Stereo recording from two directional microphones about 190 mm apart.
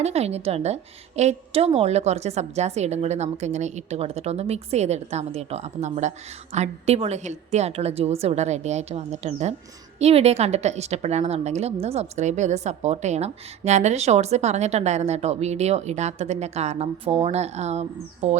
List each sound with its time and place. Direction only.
0.0 s a woman's voice: 35° right (ahead or behind)